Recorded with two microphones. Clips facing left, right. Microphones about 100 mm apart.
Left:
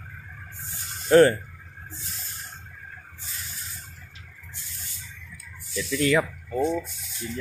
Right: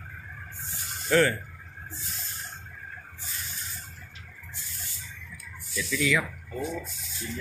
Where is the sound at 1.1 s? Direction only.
35° left (ahead or behind).